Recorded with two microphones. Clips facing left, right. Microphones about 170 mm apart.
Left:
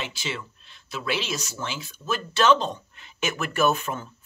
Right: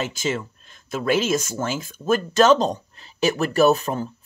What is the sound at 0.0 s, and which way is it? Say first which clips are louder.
Speech: right 8 dB; 45° right (ahead or behind).